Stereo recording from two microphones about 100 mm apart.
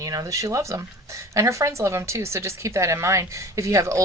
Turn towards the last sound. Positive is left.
turn(degrees=-30)  # may be behind; listen again after turning